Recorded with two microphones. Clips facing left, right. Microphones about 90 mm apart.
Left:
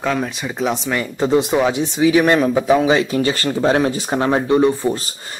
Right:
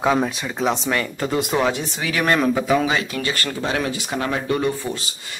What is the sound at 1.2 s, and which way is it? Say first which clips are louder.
Speech: left 6 dB; 20° left (ahead or behind).